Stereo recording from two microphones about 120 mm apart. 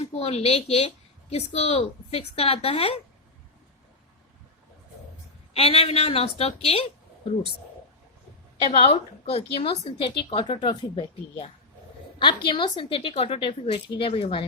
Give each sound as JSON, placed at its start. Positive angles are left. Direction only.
{"t": 0.0, "sound": "a woman's voice", "side_deg": 60}
{"t": 5.5, "sound": "a woman's voice", "side_deg": 55}
{"t": 8.8, "sound": "a woman's voice", "side_deg": 55}